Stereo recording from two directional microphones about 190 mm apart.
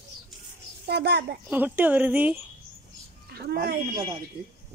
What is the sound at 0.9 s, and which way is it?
Speech, 60° right (ahead or behind).